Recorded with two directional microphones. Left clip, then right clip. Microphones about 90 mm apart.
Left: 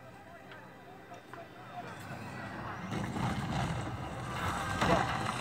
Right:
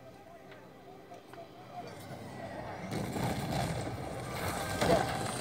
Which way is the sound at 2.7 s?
60° right (ahead or behind).